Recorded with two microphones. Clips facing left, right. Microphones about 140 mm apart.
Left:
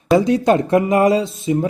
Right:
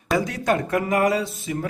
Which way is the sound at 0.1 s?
25° left (ahead or behind).